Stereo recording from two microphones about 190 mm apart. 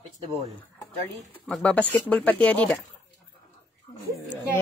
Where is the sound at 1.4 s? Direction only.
5° left (ahead or behind).